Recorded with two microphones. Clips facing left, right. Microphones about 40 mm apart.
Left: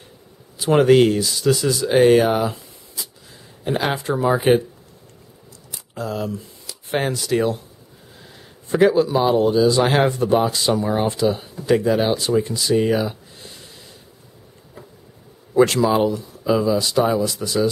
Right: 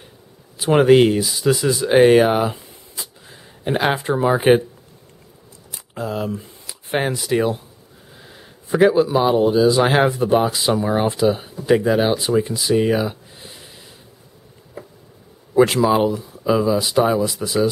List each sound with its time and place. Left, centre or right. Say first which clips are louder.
0.7 s speech: right 1 dB; centre
5.9 s speech: right 1 dB; centre
15.5 s speech: right 1 dB; centre